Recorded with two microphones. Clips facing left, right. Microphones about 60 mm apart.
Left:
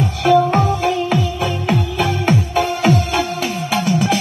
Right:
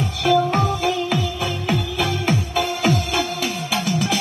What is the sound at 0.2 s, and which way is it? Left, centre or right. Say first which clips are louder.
Music: left 4 dB; left.